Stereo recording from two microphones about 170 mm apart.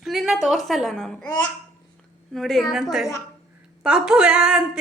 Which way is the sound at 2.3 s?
Centre (ahead or behind).